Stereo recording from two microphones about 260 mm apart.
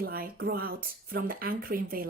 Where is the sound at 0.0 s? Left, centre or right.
Right.